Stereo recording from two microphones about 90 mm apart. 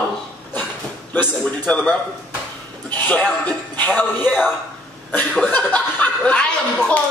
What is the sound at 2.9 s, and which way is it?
Speech, 20° left (ahead or behind).